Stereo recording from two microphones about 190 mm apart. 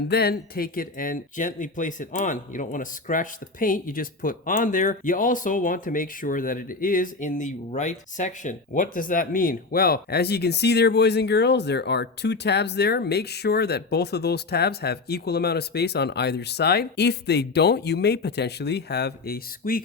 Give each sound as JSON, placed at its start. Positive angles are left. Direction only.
{"t": 0.1, "sound": "speech", "side_deg": 55}